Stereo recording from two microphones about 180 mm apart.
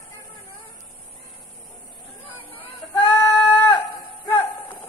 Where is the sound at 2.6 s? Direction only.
10° left (ahead or behind).